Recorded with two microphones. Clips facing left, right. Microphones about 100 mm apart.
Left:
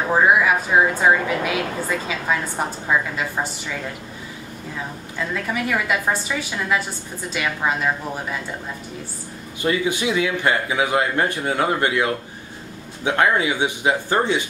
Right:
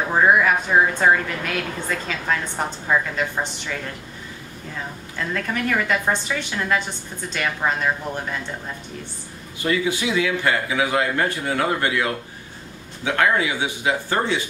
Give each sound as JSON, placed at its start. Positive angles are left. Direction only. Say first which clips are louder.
{"t": 0.1, "sound": "a woman's voice", "louder": "left 1 dB", "side_deg": 5}
{"t": 5.3, "sound": "a woman's voice", "louder": "even", "side_deg": 5}
{"t": 9.6, "sound": "a man's voice", "louder": "left 1 dB", "side_deg": 20}